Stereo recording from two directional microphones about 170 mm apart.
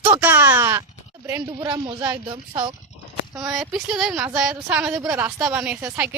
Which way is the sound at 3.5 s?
Centre (ahead or behind).